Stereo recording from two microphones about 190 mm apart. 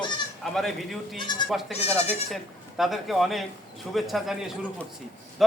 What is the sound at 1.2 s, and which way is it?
Speech, 25° left (ahead or behind).